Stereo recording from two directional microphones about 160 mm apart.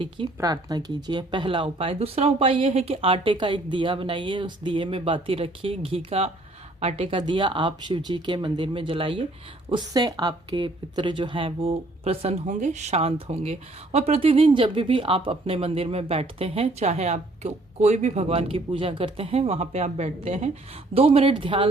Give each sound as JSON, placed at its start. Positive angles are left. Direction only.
{"t": 0.3, "sound": "speech", "side_deg": -25}